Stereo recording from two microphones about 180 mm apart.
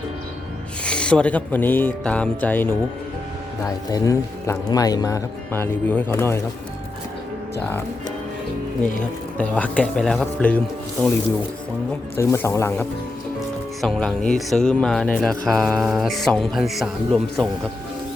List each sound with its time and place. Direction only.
0.9 s speech: 5° left (ahead or behind)
3.8 s speech: 20° left (ahead or behind)
9.4 s speech: 5° left (ahead or behind)
12.1 s speech: 15° left (ahead or behind)